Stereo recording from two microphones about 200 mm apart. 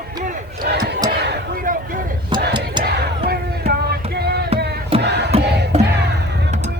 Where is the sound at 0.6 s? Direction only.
55° right (ahead or behind).